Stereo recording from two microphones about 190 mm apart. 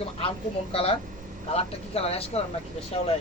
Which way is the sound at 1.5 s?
30° left (ahead or behind).